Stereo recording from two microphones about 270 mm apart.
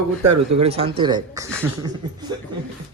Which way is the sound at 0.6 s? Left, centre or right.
Right.